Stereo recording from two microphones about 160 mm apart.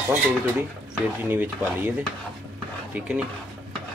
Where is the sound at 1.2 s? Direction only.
10° right (ahead or behind).